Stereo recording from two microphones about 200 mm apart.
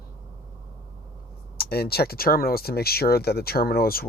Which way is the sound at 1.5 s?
50° left (ahead or behind).